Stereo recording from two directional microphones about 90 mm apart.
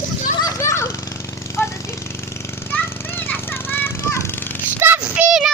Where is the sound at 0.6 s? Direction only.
30° left (ahead or behind).